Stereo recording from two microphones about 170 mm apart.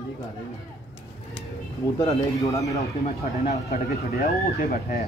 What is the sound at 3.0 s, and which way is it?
Speech, 45° left (ahead or behind).